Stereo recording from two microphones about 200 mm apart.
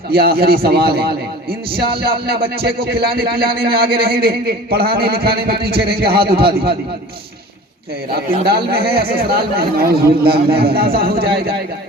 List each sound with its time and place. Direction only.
0.1 s a man's voice: 50° right (ahead or behind)
8.4 s a man's voice: 50° right (ahead or behind)